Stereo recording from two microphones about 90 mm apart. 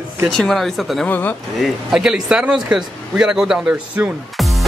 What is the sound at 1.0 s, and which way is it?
Speech, 20° left (ahead or behind).